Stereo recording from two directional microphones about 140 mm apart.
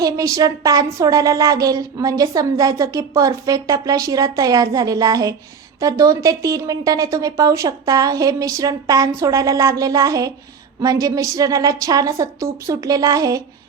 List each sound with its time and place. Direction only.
0.0 s speech: 25° right (ahead or behind)